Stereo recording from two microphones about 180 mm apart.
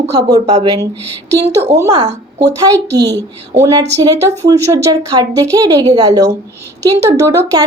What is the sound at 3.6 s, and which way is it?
A woman's voice, 20° right (ahead or behind).